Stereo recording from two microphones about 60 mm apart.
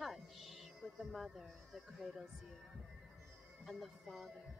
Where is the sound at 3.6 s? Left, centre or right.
Centre.